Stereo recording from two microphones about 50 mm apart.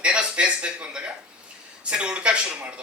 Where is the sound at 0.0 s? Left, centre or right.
Right.